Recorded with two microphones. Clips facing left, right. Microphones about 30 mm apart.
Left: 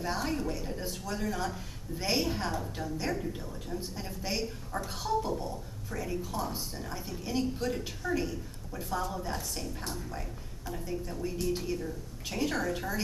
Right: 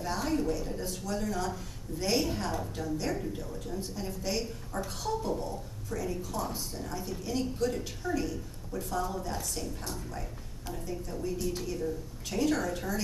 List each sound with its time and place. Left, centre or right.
0.0 s a woman's voice: centre